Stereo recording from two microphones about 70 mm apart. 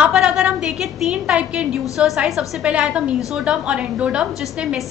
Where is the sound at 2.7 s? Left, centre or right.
Centre.